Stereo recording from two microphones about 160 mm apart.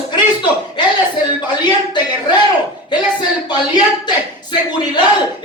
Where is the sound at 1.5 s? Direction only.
25° left (ahead or behind).